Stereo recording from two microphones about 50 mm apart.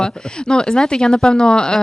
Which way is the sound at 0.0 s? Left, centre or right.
Centre.